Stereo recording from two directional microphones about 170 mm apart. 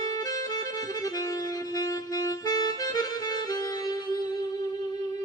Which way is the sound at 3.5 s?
25° left (ahead or behind).